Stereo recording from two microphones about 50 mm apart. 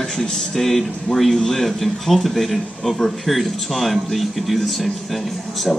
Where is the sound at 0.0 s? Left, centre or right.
Centre.